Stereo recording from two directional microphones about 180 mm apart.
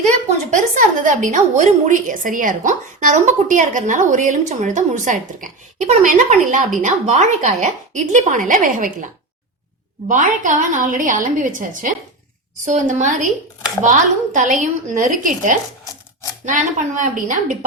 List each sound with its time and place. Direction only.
0.5 s a woman's voice: 45° right (ahead or behind)
10.1 s a woman's voice: 45° right (ahead or behind)